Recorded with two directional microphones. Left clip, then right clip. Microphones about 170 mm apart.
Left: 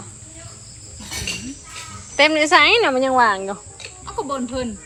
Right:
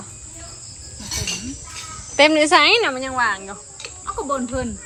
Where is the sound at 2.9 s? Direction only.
10° left (ahead or behind).